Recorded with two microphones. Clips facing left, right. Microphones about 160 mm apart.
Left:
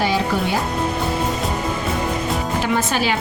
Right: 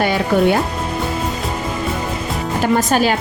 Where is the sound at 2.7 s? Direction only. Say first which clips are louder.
Right 6 dB; 45° right (ahead or behind).